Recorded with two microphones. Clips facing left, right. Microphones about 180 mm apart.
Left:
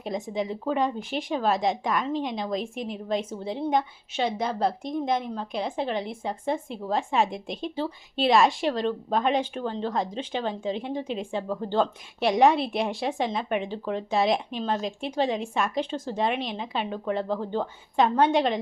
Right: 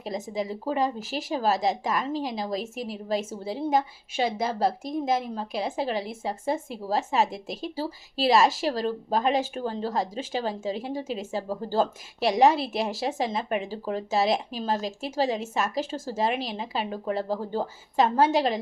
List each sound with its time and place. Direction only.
0.0 s a woman's voice: centre (ahead or behind)
17.2 s speech: 35° right (ahead or behind)
17.6 s speech: 5° right (ahead or behind)